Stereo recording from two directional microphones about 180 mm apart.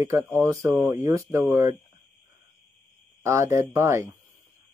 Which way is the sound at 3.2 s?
15° right (ahead or behind).